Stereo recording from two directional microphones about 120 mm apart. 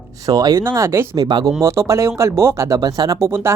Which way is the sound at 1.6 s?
25° right (ahead or behind).